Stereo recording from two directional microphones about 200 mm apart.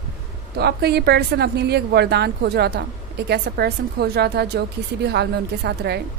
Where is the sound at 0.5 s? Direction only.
55° right (ahead or behind).